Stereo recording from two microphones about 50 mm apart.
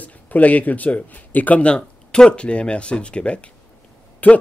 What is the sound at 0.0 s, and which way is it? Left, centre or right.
Speech, left.